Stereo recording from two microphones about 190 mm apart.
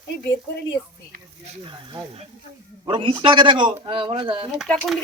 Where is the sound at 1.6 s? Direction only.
25° right (ahead or behind).